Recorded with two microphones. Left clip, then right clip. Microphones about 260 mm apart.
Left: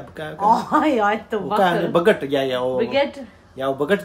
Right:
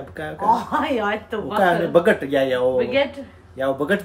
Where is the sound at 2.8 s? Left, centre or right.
Left.